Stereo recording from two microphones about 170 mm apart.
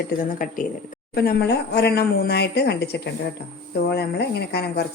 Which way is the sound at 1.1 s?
70° left (ahead or behind).